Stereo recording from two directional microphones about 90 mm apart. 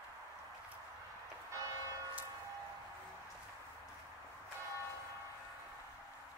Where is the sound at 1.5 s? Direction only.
35° right (ahead or behind).